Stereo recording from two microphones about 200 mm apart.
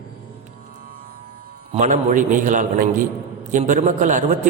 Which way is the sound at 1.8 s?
40° right (ahead or behind).